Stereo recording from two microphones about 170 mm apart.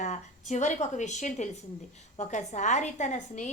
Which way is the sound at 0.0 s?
45° left (ahead or behind).